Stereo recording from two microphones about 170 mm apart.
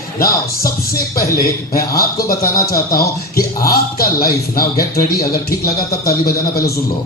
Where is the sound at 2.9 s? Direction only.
65° left (ahead or behind).